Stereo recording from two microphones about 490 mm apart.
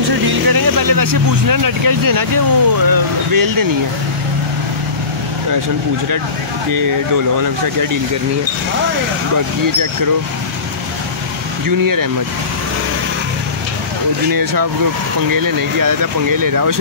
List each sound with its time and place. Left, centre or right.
0.3 s speech: right
11.6 s speech: right
14.3 s speech: right